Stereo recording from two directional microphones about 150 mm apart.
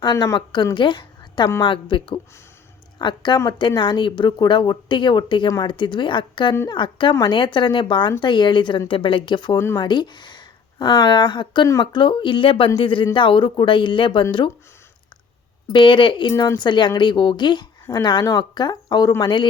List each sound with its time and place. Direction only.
0.0 s a woman's voice: 25° left (ahead or behind)
9.6 s speech: 20° left (ahead or behind)
9.8 s speech: 30° left (ahead or behind)
15.7 s speech: 35° left (ahead or behind)
16.3 s speech: 20° left (ahead or behind)
16.6 s speech: 30° left (ahead or behind)